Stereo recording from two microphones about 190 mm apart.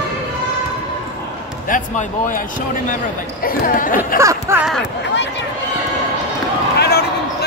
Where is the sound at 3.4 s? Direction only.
45° left (ahead or behind).